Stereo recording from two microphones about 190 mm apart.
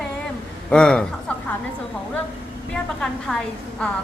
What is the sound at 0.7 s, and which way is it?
Speech, 5° left (ahead or behind).